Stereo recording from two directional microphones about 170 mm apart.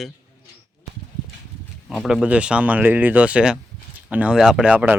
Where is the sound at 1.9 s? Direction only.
Centre (ahead or behind).